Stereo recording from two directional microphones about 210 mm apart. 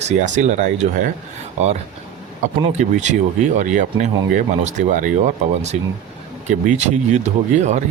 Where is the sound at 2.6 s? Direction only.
35° right (ahead or behind).